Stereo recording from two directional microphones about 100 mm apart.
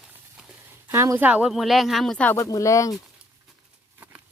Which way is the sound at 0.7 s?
25° right (ahead or behind).